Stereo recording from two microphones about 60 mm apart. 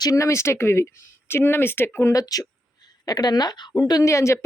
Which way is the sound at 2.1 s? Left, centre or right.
Left.